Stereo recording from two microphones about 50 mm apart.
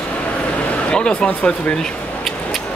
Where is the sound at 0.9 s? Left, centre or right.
Centre.